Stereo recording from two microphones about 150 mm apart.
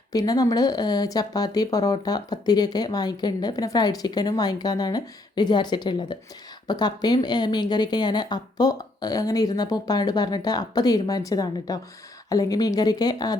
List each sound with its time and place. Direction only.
0.1 s speech: 25° left (ahead or behind)